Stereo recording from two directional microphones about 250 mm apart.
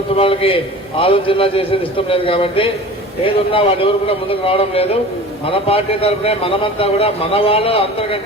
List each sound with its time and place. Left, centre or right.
0.2 s a man's voice: left